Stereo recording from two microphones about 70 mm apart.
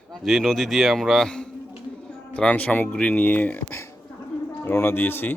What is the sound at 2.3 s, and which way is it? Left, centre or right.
Speech, left.